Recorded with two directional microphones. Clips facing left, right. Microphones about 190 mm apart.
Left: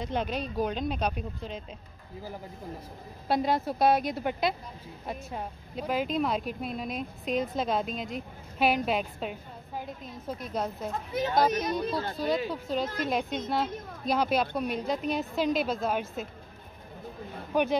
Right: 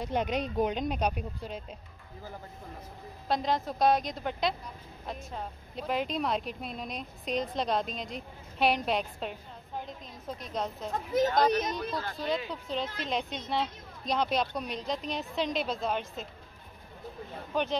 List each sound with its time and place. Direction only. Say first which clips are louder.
0.0 s speech: right 1 dB; 15° right (ahead or behind)
3.3 s a woman's voice: left 3 dB; 5° left (ahead or behind)
11.8 s speech: left 4 dB; 25° left (ahead or behind)
12.6 s a woman's voice: left 4 dB; 45° left (ahead or behind)
13.5 s speech: left 2 dB; 5° left (ahead or behind)
17.5 s a woman's voice: left 4 dB; 10° left (ahead or behind)